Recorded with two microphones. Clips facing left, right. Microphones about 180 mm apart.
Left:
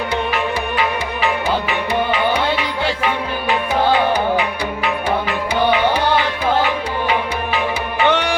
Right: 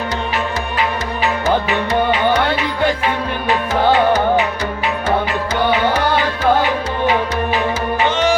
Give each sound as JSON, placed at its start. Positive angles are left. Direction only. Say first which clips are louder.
{"t": 8.0, "sound": "music", "louder": "right 1 dB", "side_deg": 65}